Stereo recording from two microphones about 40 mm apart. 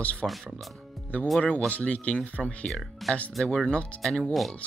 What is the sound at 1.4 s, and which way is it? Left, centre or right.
Speech, left.